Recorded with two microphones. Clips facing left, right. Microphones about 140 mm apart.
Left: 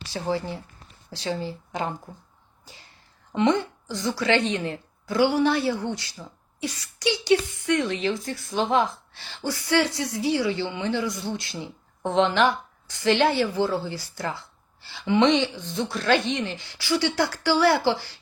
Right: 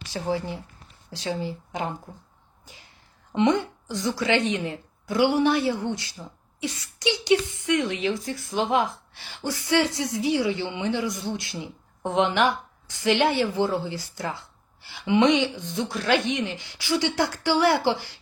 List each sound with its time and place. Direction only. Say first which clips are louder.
0.0 s a woman's voice: even; 15° right (ahead or behind)
3.3 s a woman's voice: even; 15° right (ahead or behind)